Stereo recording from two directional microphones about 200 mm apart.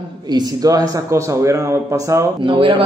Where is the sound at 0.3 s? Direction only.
20° right (ahead or behind).